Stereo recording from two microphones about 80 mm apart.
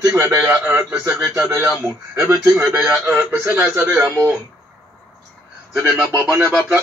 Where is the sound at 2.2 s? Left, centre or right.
Right.